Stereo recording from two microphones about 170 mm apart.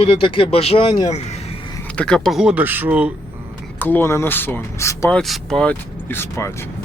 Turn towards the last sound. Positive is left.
turn(degrees=15)  # may be behind; listen again after turning